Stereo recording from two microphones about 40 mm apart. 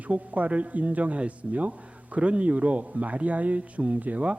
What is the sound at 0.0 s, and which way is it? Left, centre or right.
Speech, right.